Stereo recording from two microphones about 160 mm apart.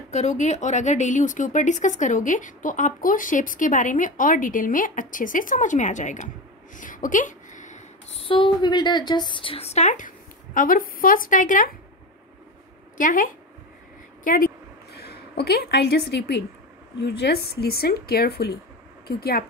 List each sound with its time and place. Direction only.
0.1 s a woman's voice: 45° left (ahead or behind)
12.9 s speech: 55° left (ahead or behind)
14.2 s a sound: 60° left (ahead or behind); by 16.4 s 90° left
17.0 s speech: 85° left